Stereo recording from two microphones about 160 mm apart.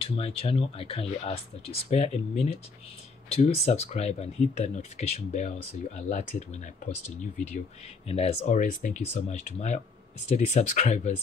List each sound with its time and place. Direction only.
0.0 s speech: 35° left (ahead or behind)
8.1 s speech: 40° left (ahead or behind)
8.5 s speech: 50° left (ahead or behind)